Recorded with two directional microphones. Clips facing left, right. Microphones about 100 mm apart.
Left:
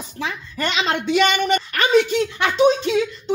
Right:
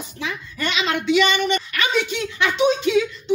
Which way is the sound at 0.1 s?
40° left (ahead or behind).